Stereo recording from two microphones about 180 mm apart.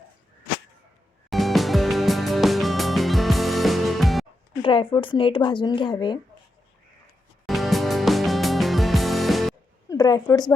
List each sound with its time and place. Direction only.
1.3 s music: centre (ahead or behind)
4.6 s speech: 30° left (ahead or behind)
7.4 s music: centre (ahead or behind)
9.9 s a woman's voice: 20° left (ahead or behind)